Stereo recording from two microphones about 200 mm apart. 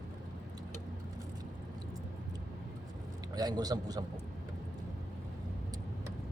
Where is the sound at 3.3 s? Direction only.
20° right (ahead or behind).